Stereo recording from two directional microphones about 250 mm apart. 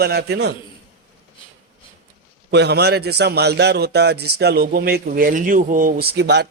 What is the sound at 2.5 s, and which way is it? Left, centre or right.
A man's voice, right.